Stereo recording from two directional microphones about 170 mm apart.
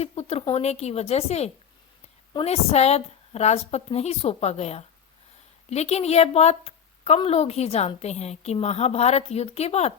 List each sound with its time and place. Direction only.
0.0 s a woman's voice: 40° left (ahead or behind)